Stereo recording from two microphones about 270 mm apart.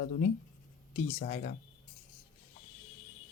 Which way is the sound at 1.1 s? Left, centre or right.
Left.